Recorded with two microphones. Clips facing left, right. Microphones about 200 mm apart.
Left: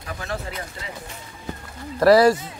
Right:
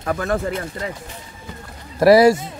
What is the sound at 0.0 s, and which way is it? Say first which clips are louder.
Speech: right 9 dB; 60° right (ahead or behind).